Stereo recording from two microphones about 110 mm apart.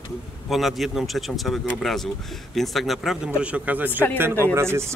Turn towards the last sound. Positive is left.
turn(degrees=-25)  # may be behind; listen again after turning